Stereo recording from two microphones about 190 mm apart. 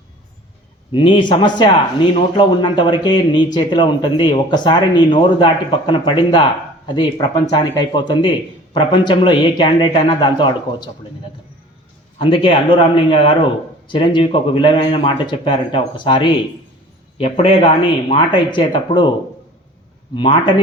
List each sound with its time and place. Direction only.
0.9 s a man's voice: 25° left (ahead or behind)
12.2 s a man's voice: 25° left (ahead or behind)
20.1 s a man's voice: 25° left (ahead or behind)